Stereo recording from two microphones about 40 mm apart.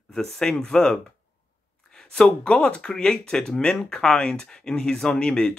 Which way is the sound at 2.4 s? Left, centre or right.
Left.